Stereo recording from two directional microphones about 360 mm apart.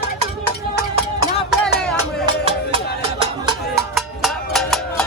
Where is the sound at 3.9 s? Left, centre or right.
Centre.